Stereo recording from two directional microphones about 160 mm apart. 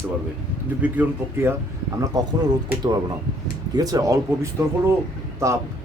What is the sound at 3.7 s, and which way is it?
Speech, 25° right (ahead or behind).